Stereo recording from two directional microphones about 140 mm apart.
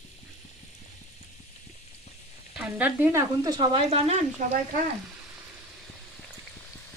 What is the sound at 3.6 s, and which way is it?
Speech, 40° right (ahead or behind).